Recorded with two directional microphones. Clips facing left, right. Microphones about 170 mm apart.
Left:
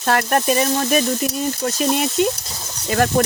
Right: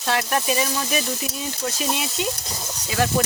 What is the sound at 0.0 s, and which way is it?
Speech, 50° left (ahead or behind).